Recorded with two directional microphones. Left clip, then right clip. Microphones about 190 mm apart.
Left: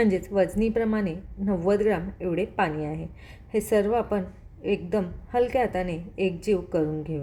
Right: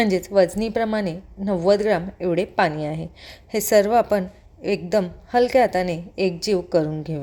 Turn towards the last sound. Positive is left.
turn(degrees=-25)  # may be behind; listen again after turning